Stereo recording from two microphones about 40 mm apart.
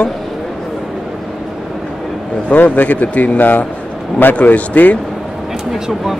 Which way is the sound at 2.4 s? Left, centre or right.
Left.